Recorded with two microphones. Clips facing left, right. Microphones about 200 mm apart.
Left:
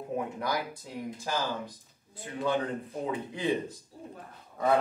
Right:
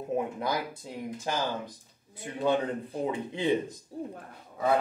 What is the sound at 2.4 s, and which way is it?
Speech, 25° right (ahead or behind).